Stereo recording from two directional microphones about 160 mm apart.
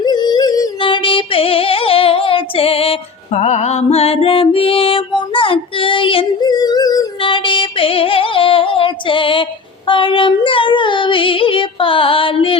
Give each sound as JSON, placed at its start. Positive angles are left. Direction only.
{"t": 0.0, "sound": "music", "side_deg": 25}